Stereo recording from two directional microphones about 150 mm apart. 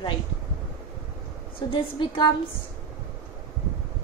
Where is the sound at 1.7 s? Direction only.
30° left (ahead or behind).